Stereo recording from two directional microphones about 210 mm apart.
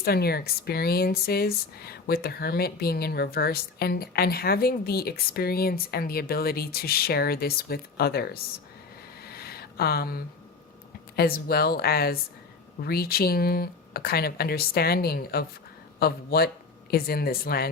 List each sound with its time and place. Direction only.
0.0 s speech: 45° left (ahead or behind)
9.2 s a sound: 45° left (ahead or behind)
11.2 s speech: 45° left (ahead or behind)